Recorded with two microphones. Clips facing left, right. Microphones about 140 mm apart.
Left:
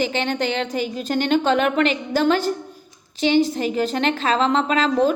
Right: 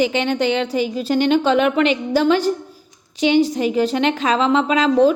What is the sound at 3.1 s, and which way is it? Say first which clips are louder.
Speech: right 2 dB; 35° left (ahead or behind).